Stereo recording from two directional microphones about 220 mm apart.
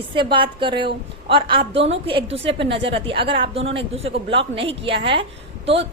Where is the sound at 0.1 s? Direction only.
20° right (ahead or behind).